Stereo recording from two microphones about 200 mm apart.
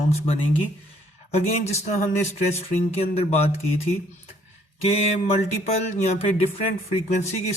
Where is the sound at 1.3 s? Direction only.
35° left (ahead or behind).